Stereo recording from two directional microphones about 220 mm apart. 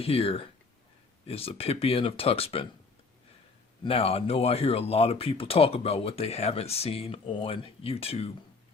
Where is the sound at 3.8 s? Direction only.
25° left (ahead or behind).